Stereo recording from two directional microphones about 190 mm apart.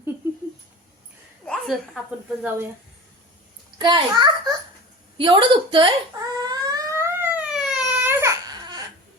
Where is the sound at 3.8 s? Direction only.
25° right (ahead or behind).